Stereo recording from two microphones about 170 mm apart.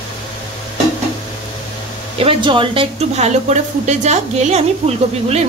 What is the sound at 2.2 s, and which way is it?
A woman's voice, 30° right (ahead or behind).